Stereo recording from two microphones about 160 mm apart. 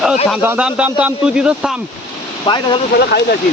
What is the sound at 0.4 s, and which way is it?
A man's voice, 10° right (ahead or behind).